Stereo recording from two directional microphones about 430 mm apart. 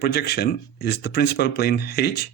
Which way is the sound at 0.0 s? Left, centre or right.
Left.